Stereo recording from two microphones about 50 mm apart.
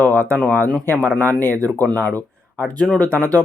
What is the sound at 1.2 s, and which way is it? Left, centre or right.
Speech, left.